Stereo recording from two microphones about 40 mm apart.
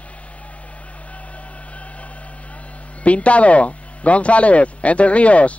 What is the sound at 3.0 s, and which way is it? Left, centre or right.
A man's voice, left.